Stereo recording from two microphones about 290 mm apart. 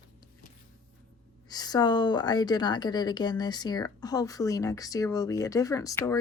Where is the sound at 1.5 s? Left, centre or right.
Centre.